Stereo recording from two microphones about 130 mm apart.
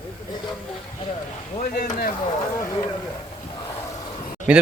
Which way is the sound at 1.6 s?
90° left.